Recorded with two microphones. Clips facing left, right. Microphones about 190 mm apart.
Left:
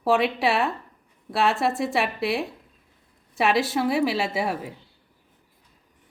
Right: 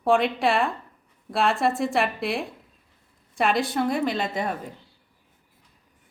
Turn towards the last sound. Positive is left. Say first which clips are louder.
# left 2 dB
turn(degrees=10)  # may be behind; listen again after turning